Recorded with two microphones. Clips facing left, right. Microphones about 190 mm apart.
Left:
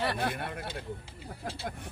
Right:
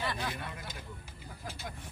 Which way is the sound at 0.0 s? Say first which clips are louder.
Left 5 dB; 60° left (ahead or behind).